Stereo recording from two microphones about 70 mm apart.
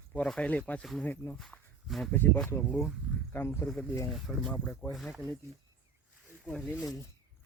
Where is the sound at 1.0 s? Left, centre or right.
Left.